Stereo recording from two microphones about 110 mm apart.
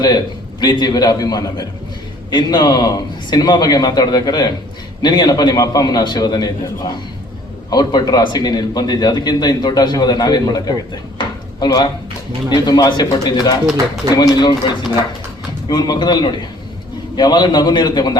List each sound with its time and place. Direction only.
0.6 s a man's voice: 40° left (ahead or behind)
11.2 s a sound: 40° left (ahead or behind)
12.5 s a man's voice: 35° left (ahead or behind)